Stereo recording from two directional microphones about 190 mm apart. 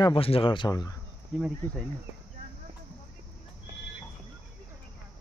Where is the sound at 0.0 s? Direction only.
30° left (ahead or behind).